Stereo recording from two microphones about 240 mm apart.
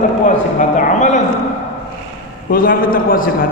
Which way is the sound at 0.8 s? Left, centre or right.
Left.